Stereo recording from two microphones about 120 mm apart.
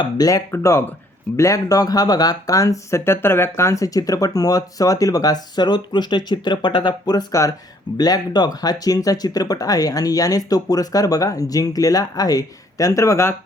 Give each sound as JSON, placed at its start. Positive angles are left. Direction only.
{"t": 0.0, "sound": "speech", "side_deg": 30}